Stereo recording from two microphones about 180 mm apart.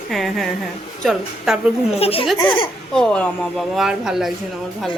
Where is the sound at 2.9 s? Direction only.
5° left (ahead or behind).